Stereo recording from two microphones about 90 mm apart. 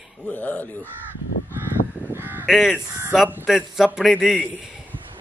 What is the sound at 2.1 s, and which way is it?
Crow, 25° right (ahead or behind).